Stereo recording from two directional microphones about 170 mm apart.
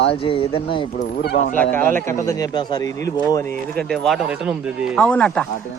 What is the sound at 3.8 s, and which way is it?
Speech, centre (ahead or behind).